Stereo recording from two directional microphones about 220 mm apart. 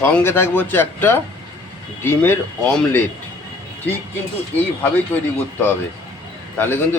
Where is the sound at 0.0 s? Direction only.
10° left (ahead or behind).